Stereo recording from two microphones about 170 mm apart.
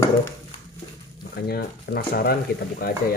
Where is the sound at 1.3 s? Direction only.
65° left (ahead or behind).